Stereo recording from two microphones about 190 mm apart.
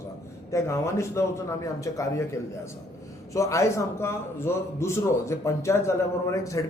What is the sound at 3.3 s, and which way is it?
A man's voice, 15° left (ahead or behind).